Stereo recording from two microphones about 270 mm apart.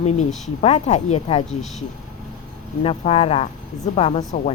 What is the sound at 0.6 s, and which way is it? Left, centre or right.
Speech, left.